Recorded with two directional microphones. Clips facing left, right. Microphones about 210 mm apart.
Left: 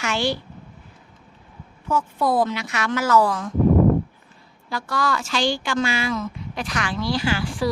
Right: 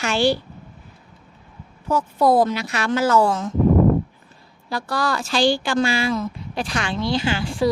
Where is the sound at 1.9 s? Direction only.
40° right (ahead or behind).